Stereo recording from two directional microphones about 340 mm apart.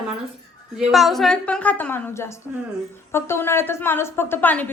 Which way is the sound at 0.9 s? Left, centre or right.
Centre.